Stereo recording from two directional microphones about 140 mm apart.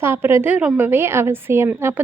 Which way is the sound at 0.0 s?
15° right (ahead or behind).